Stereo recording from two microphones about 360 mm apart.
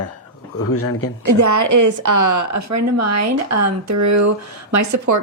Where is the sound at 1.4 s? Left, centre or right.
Right.